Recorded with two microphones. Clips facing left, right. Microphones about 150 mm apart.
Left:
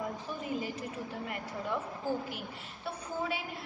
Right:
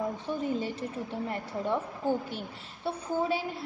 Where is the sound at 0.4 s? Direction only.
30° right (ahead or behind).